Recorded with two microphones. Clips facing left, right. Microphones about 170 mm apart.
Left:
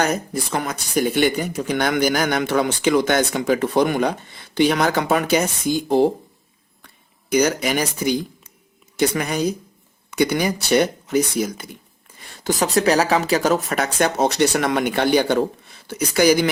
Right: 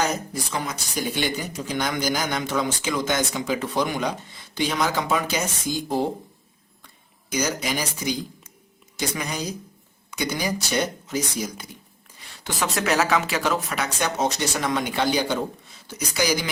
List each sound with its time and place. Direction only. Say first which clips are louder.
0.0 s speech: left 4 dB; 60° left (ahead or behind)
7.3 s speech: left 7 dB; 60° left (ahead or behind)
12.2 s speech: left 6 dB; 45° left (ahead or behind)